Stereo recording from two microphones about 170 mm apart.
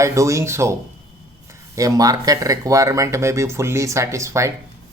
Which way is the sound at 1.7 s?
20° right (ahead or behind).